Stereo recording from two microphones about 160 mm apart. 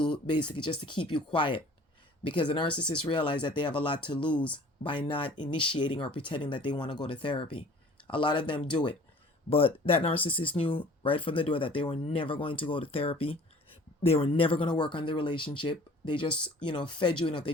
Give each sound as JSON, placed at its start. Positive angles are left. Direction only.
{"t": 0.3, "sound": "speech", "side_deg": 30}